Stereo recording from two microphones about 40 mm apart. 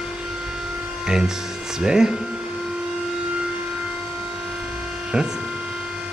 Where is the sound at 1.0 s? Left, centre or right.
Centre.